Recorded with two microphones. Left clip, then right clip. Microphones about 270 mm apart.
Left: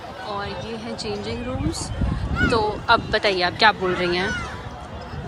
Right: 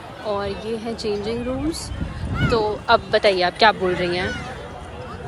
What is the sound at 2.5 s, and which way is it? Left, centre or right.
A woman's voice, centre.